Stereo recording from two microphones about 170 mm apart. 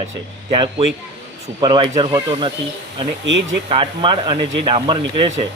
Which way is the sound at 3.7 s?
30° right (ahead or behind).